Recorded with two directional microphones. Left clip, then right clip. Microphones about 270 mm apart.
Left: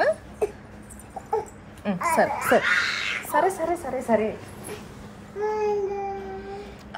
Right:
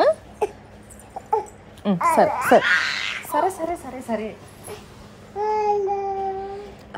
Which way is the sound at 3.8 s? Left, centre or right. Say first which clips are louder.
Left 5 dB; centre.